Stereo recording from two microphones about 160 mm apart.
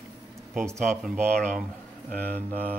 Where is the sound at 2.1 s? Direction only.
70° right (ahead or behind).